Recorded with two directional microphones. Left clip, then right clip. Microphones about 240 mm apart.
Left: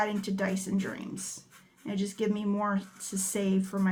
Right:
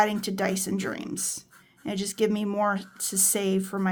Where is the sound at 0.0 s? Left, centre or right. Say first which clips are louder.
Right 6 dB; right.